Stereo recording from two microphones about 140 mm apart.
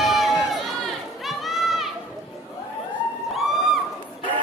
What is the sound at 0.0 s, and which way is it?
Run, centre (ahead or behind).